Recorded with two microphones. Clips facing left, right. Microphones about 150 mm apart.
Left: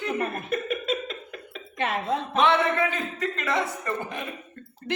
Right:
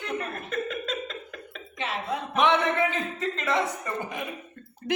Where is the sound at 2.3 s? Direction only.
15° right (ahead or behind).